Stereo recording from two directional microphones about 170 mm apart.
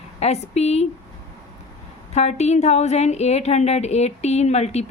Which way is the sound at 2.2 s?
40° left (ahead or behind).